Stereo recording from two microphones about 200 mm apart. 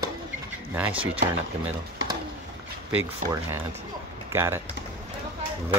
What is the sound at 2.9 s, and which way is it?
Speech, 10° right (ahead or behind).